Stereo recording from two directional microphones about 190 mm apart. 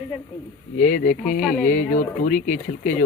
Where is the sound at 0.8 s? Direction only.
45° left (ahead or behind).